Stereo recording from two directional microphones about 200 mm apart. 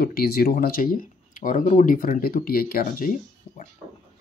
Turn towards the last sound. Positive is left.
turn(degrees=45)  # may be behind; listen again after turning